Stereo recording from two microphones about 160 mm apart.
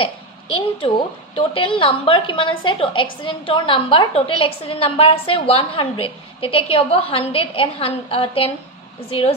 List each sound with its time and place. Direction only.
0.0 s a woman's voice: 35° left (ahead or behind)